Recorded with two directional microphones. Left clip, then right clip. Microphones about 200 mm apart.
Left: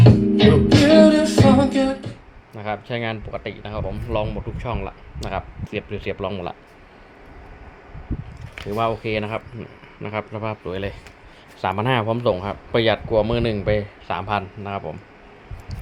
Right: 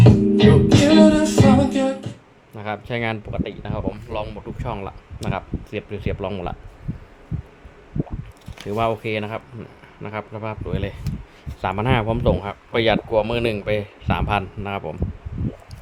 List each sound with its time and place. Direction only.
0.3 s music: 55° right (ahead or behind)
2.6 s speech: 5° right (ahead or behind)
8.7 s speech: 15° right (ahead or behind)
9.0 s speech: 5° left (ahead or behind); by 14.9 s 15° right (ahead or behind)